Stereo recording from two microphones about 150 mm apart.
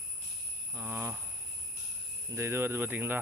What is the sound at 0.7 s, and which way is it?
Speech, 15° right (ahead or behind).